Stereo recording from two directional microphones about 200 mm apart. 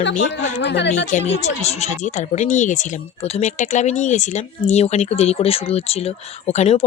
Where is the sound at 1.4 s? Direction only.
35° left (ahead or behind).